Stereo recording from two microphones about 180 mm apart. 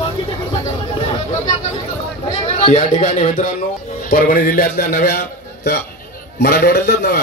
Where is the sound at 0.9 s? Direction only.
35° left (ahead or behind).